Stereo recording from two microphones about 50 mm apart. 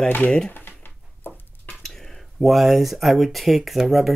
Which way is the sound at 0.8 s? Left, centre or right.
Left.